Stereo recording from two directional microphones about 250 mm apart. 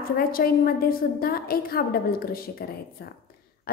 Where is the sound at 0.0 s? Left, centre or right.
Left.